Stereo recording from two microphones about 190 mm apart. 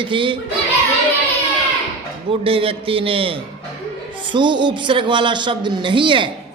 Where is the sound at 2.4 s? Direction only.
30° right (ahead or behind).